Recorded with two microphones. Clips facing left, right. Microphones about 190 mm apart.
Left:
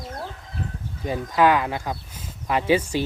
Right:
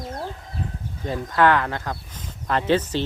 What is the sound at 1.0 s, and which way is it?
Speech, 10° left (ahead or behind).